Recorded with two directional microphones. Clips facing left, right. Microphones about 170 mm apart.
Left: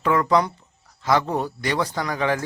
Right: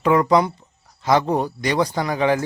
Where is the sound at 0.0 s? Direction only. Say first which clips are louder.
Right 3 dB; 15° right (ahead or behind).